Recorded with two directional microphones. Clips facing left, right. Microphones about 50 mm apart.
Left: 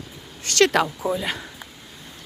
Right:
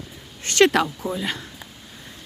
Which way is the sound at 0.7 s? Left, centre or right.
Centre.